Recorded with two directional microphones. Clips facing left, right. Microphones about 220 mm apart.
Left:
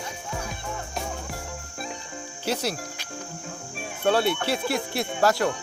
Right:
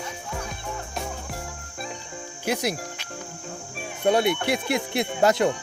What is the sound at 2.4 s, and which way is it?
Speech, 10° right (ahead or behind).